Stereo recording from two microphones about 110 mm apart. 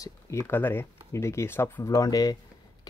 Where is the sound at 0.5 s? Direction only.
20° left (ahead or behind).